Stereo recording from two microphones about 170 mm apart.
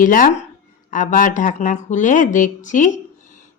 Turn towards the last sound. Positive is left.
turn(degrees=45)  # may be behind; listen again after turning